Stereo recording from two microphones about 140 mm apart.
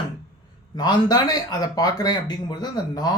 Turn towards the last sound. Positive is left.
turn(degrees=30)  # may be behind; listen again after turning